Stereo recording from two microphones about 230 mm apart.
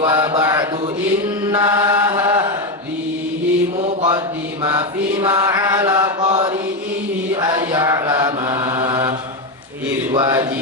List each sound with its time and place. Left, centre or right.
0.0 s mantra: centre
1.5 s chant: centre
3.8 s mantra: right